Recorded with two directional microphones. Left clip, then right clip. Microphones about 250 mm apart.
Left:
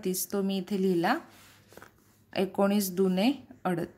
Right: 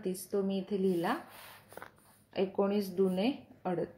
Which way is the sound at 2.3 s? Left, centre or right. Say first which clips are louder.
Left 4 dB; left.